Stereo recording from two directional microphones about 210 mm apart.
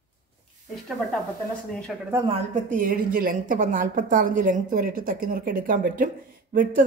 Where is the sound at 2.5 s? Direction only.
40° right (ahead or behind).